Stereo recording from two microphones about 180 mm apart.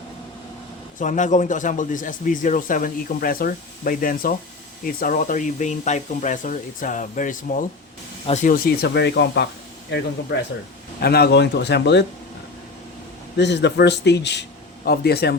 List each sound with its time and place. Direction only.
0.9 s speech: 45° left (ahead or behind); by 9.5 s 70° left (ahead or behind)
11.0 s speech: 60° left (ahead or behind)
13.3 s speech: 70° left (ahead or behind)